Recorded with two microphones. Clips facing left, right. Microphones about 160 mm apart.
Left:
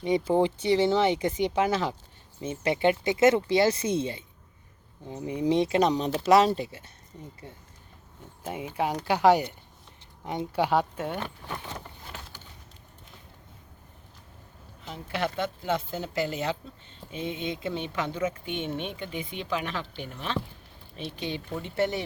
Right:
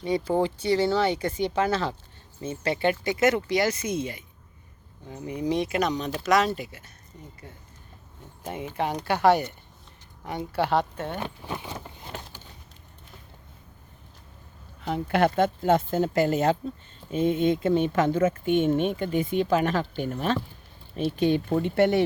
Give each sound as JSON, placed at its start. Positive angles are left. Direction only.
{"t": 0.0, "sound": "speech", "side_deg": 20}
{"t": 8.4, "sound": "speech", "side_deg": 10}
{"t": 11.2, "sound": "a sound", "side_deg": -15}
{"t": 14.8, "sound": "speech", "side_deg": -65}